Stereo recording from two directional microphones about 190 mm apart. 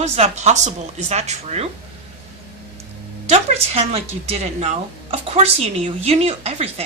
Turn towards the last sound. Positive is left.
turn(degrees=-35)  # may be behind; listen again after turning